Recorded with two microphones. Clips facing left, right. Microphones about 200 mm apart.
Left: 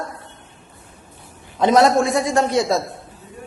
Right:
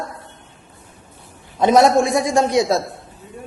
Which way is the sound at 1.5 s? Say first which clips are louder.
Right 1 dB; 15° right (ahead or behind).